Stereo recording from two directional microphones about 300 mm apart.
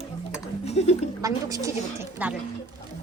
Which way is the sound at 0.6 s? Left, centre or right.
Left.